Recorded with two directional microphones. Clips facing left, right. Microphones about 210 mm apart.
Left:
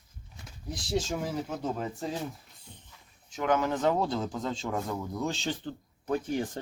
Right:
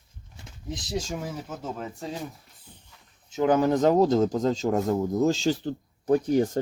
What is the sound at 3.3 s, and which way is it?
Speech, 30° right (ahead or behind).